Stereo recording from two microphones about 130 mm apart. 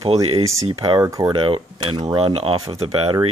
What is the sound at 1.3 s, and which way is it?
Speech, 40° right (ahead or behind).